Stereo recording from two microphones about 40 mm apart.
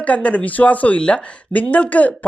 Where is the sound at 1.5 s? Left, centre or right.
Left.